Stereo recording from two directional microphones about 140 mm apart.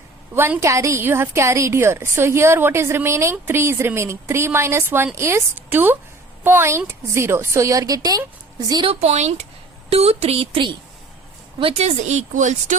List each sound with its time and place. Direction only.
0.3 s a woman's voice: 15° right (ahead or behind)
8.7 s speech: 35° right (ahead or behind)
9.0 s speech: 50° right (ahead or behind)